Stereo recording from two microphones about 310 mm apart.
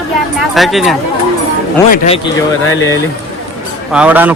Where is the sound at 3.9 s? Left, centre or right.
Centre.